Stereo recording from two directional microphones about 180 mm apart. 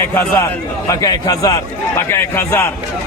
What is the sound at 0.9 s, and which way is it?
A man's voice, 20° left (ahead or behind).